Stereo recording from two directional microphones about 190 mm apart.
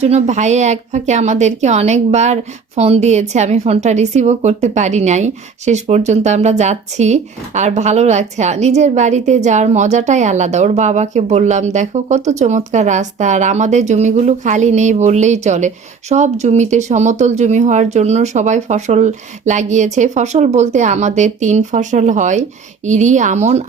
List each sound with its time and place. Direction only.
0.0 s speech: 35° right (ahead or behind)